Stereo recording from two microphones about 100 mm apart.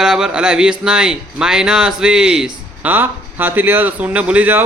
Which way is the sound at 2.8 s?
20° right (ahead or behind).